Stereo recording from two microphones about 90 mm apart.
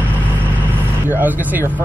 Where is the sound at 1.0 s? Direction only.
20° right (ahead or behind).